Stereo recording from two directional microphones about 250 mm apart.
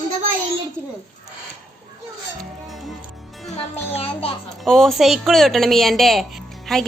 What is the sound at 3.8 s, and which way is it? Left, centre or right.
Speech, left.